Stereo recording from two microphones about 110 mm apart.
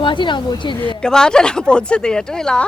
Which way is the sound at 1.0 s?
5° left (ahead or behind).